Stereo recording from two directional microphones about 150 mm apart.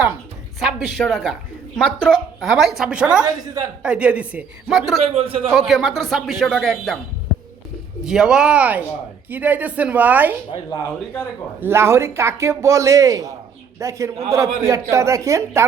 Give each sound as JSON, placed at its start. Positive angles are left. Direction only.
{"t": 0.6, "sound": "speech", "side_deg": 0}
{"t": 3.2, "sound": "a man's voice", "side_deg": -25}
{"t": 3.8, "sound": "a woman's voice", "side_deg": -10}
{"t": 5.0, "sound": "a man's voice", "side_deg": -40}
{"t": 5.5, "sound": "speech", "side_deg": 0}
{"t": 8.0, "sound": "a woman's voice", "side_deg": -5}
{"t": 11.6, "sound": "a man's voice", "side_deg": -15}